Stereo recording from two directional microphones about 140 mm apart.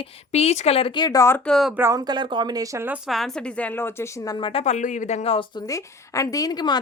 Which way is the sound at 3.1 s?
5° left (ahead or behind).